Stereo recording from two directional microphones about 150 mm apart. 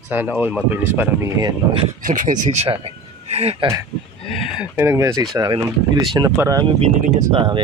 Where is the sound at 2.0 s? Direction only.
60° right (ahead or behind); by 3.6 s 45° right (ahead or behind).